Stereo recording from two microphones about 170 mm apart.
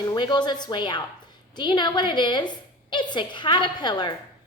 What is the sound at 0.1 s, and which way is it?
A woman's voice, 25° left (ahead or behind).